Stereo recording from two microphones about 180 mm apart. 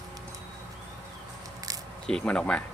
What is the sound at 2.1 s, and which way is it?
Speech, 5° left (ahead or behind).